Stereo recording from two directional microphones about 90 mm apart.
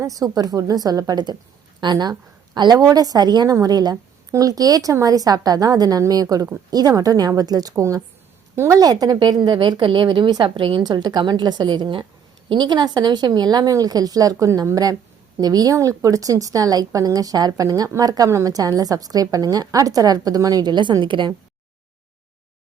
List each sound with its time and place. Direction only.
0.0 s a woman's voice: 40° right (ahead or behind)
9.1 s a woman's voice: 60° right (ahead or behind)
10.8 s a woman's voice: 50° right (ahead or behind)
12.5 s a woman's voice: 55° right (ahead or behind)